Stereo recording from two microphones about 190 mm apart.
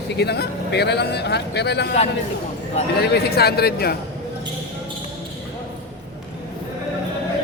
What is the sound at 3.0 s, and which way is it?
Speech, 60° left (ahead or behind).